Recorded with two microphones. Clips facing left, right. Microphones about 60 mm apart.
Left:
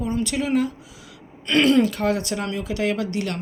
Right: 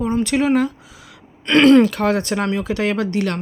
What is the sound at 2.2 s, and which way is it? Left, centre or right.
Speech, right.